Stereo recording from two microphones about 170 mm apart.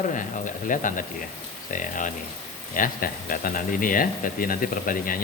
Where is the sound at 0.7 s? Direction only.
50° left (ahead or behind).